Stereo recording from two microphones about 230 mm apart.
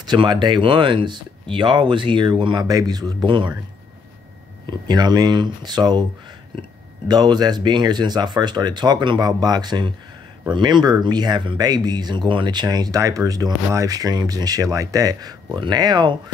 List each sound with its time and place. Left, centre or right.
0.0 s speech: centre
4.6 s speech: centre
7.1 s speech: centre